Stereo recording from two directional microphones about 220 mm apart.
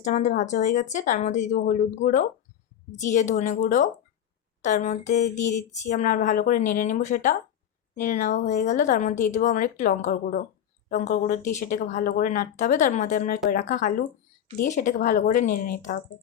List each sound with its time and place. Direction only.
0.0 s speech: 35° left (ahead or behind)